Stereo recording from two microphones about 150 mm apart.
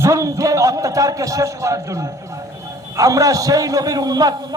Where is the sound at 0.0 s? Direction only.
20° right (ahead or behind).